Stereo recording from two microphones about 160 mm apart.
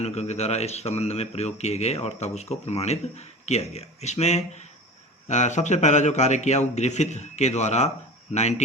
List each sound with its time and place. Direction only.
0.0 s speech: 45° left (ahead or behind)